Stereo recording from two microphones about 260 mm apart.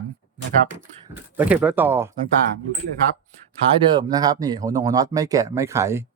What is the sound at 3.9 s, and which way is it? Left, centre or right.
Speech, centre.